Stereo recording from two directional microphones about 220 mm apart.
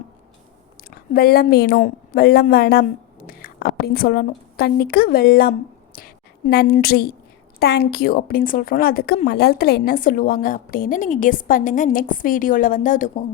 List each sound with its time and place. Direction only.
0.9 s a woman's voice: 45° left (ahead or behind)